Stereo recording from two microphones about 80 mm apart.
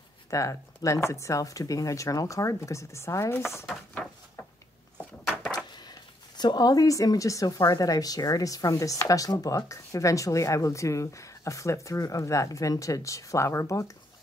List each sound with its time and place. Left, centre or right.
0.3 s speech: left
5.8 s speech: left